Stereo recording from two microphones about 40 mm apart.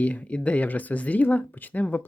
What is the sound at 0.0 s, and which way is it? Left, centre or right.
Speech, left.